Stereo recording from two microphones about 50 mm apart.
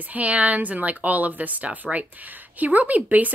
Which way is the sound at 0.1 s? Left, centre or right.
Right.